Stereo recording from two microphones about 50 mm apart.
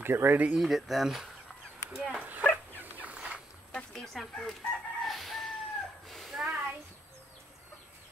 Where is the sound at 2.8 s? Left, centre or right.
Right.